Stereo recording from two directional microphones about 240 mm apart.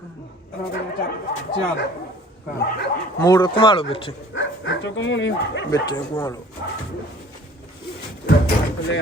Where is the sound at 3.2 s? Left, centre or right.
Centre.